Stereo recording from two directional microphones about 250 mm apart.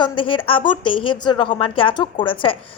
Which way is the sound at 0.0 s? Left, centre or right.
Centre.